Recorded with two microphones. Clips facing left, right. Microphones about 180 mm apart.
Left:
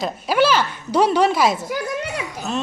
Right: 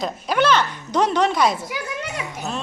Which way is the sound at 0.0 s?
5° left (ahead or behind).